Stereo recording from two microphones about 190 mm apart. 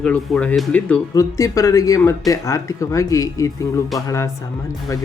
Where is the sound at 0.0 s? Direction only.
5° left (ahead or behind).